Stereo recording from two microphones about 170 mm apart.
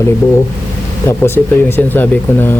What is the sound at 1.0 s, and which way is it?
Speech, 15° left (ahead or behind).